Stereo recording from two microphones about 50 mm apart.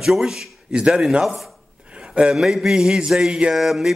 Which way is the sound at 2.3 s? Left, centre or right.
Centre.